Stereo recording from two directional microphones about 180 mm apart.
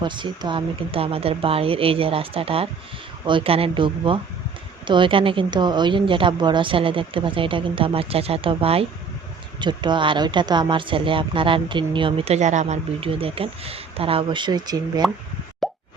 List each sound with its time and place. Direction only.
0.0 s speech: 25° right (ahead or behind)
15.6 s plop: centre (ahead or behind)